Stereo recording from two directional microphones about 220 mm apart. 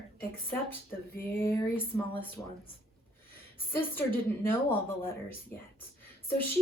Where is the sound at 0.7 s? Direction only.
10° left (ahead or behind).